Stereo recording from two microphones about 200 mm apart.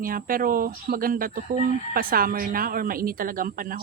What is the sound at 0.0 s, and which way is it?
Speech, 45° right (ahead or behind).